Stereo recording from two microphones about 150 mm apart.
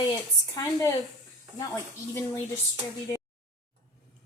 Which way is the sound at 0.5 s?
25° left (ahead or behind).